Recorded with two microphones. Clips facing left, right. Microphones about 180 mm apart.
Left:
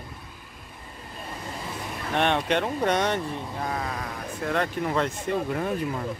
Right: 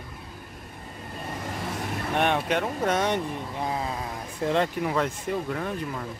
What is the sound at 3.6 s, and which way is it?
Speech, 20° right (ahead or behind).